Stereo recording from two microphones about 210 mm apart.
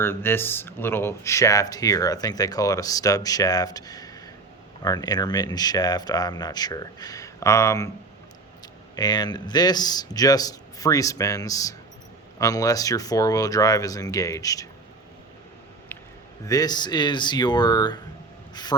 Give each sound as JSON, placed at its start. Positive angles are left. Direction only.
{"t": 0.0, "sound": "speech", "side_deg": 10}
{"t": 9.0, "sound": "speech", "side_deg": 20}
{"t": 15.9, "sound": "a sound", "side_deg": 10}
{"t": 16.5, "sound": "speech", "side_deg": 20}